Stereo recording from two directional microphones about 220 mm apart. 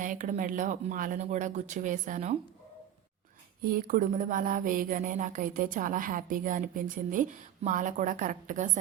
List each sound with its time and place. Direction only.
0.0 s speech: 35° right (ahead or behind)
3.6 s speech: 40° right (ahead or behind)